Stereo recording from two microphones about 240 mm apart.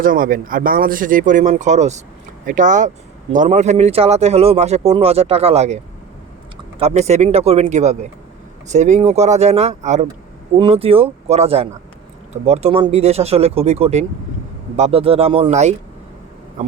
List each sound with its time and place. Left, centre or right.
0.0 s speech: right